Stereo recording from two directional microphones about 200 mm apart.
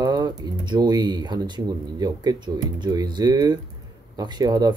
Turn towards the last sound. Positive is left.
turn(degrees=-20)  # may be behind; listen again after turning